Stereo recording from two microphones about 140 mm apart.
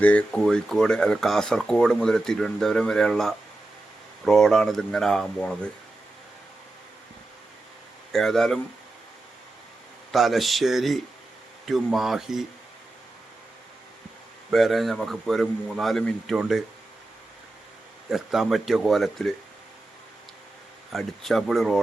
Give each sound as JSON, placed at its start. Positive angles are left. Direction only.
{"t": 0.0, "sound": "speech", "side_deg": 10}
{"t": 8.1, "sound": "speech", "side_deg": 0}
{"t": 10.1, "sound": "speech", "side_deg": 0}
{"t": 14.5, "sound": "speech", "side_deg": 0}
{"t": 18.1, "sound": "speech", "side_deg": 0}
{"t": 20.9, "sound": "speech", "side_deg": 0}